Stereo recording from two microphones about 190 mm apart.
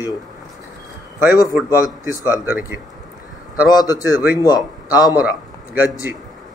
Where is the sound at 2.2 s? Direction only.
20° left (ahead or behind).